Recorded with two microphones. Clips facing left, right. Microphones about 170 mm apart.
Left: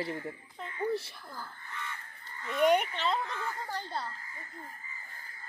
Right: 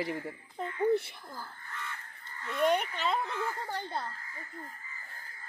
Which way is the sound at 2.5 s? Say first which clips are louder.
Left 2 dB; 10° left (ahead or behind).